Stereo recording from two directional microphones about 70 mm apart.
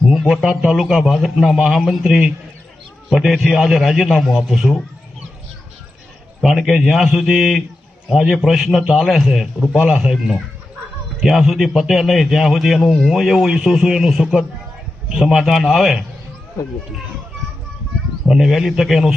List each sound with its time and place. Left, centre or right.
0.1 s a sound: centre
0.7 s a man's voice: centre
6.4 s a man's voice: centre
9.7 s speech: centre
10.0 s a man's voice: centre
18.3 s a man's voice: centre